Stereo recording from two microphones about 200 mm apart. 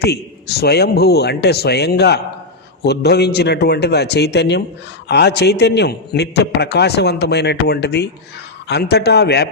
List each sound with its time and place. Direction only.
0.0 s a man's voice: 55° left (ahead or behind)